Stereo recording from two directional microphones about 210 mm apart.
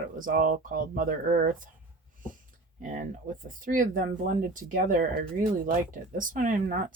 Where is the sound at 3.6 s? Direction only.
40° right (ahead or behind).